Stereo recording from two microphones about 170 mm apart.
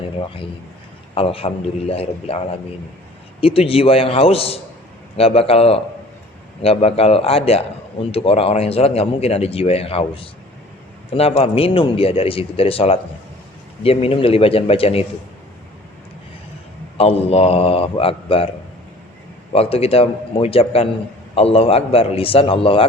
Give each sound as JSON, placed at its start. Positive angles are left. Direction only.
{"t": 1.1, "sound": "speech", "side_deg": 35}
{"t": 17.0, "sound": "speech", "side_deg": 35}
{"t": 19.5, "sound": "speech", "side_deg": 35}